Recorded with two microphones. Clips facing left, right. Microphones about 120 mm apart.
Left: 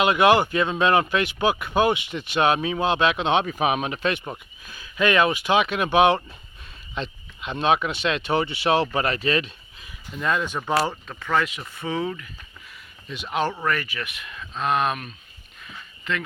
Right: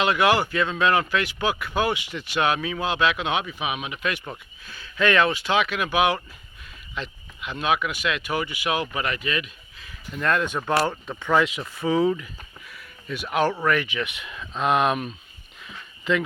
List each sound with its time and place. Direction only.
0.0 s speech: 20° left (ahead or behind)
3.4 s speech: 40° left (ahead or behind)
4.1 s speech: 20° left (ahead or behind)
9.8 s speech: 5° left (ahead or behind)